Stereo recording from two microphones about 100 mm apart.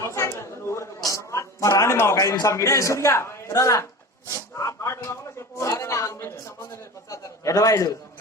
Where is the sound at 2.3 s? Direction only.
35° left (ahead or behind).